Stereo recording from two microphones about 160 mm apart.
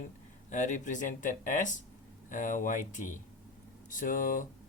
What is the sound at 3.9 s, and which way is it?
Speech, 55° left (ahead or behind).